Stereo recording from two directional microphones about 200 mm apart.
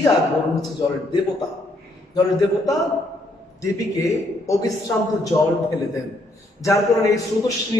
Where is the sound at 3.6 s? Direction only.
15° left (ahead or behind).